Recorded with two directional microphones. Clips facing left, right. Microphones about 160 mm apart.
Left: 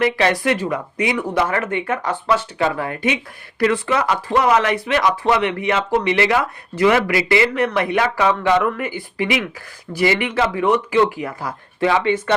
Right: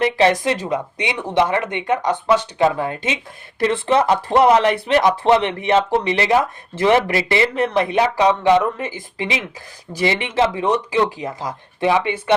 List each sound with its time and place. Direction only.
0.0 s speech: 30° right (ahead or behind)
8.0 s speech: 20° right (ahead or behind)